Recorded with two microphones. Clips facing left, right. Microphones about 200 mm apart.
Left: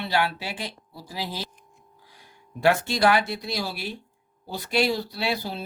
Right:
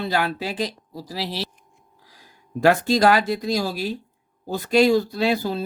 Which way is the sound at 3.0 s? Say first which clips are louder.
Right 4 dB; 40° right (ahead or behind).